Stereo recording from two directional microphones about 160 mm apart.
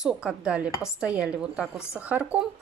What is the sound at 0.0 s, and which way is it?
A woman's voice, 5° right (ahead or behind).